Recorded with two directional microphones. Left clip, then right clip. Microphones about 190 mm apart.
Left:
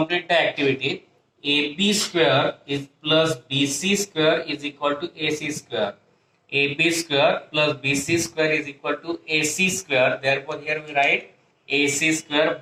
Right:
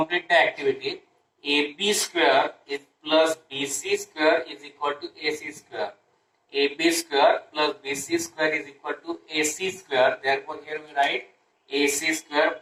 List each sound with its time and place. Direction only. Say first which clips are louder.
0.0 s speech: even; 40° left (ahead or behind)